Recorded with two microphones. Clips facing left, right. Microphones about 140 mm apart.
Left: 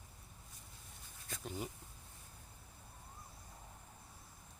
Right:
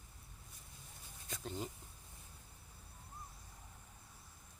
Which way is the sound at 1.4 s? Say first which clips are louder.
Even; 5° left (ahead or behind).